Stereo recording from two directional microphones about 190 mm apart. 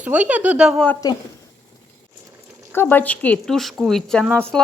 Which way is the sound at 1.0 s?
20° left (ahead or behind).